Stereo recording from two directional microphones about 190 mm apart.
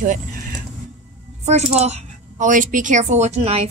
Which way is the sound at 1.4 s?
35° right (ahead or behind).